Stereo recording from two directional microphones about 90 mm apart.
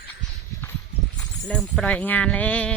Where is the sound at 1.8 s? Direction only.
15° left (ahead or behind).